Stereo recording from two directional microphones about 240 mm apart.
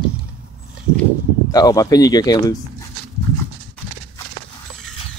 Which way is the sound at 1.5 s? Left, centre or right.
Centre.